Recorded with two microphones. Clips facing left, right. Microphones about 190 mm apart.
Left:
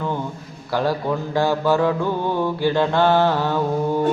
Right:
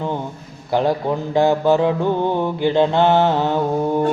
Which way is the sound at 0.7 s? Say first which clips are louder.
Right 3 dB; 20° right (ahead or behind).